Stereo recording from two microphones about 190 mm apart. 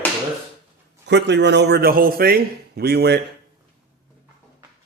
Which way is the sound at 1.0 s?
65° right (ahead or behind).